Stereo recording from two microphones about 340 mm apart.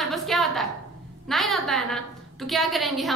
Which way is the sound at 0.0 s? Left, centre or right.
Centre.